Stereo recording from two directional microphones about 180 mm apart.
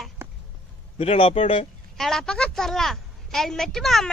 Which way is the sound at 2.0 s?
Centre (ahead or behind).